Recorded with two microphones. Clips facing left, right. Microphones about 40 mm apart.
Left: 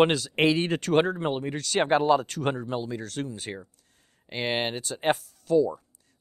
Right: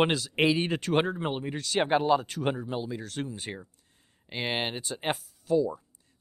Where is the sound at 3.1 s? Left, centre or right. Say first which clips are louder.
Left 2 dB; right.